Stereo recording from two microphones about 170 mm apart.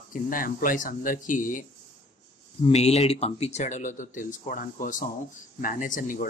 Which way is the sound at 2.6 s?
40° left (ahead or behind).